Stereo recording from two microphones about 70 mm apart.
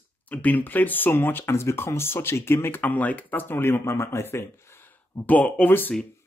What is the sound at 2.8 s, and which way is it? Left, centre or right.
Speech, left.